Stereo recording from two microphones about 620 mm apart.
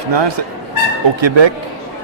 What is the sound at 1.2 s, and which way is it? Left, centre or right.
Speech, right.